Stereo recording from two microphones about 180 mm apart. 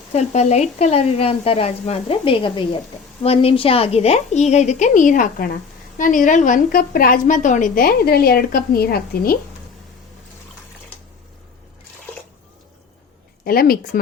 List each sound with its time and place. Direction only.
0.1 s a woman's voice: 40° left (ahead or behind); by 9.4 s 55° left (ahead or behind)
13.4 s a woman's voice: 55° left (ahead or behind)